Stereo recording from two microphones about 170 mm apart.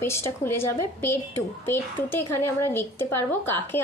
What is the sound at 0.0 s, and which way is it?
A woman's voice, 15° left (ahead or behind).